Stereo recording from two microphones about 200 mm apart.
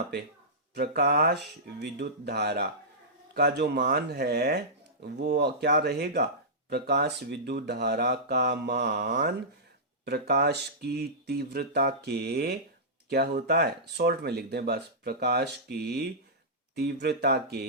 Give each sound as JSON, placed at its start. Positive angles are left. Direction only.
{"t": 0.7, "sound": "speech", "side_deg": -55}